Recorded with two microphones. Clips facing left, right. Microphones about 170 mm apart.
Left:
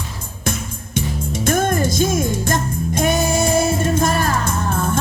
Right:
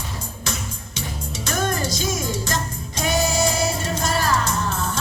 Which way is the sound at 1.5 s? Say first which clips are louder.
Left 6 dB; 50° left (ahead or behind).